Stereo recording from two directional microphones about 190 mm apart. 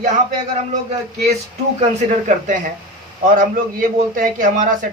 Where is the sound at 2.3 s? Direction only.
40° right (ahead or behind).